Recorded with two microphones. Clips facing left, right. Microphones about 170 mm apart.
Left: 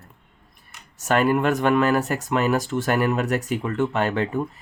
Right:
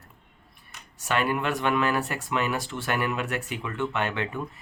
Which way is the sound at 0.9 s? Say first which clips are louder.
Left 7 dB; 45° left (ahead or behind).